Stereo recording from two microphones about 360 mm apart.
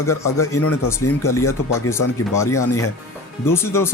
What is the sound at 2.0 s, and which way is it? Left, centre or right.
Speech, left.